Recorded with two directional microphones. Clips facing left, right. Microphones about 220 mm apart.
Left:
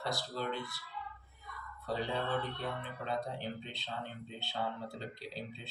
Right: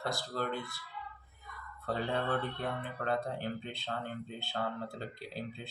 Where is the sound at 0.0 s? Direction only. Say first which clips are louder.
Right 2 dB; 50° right (ahead or behind).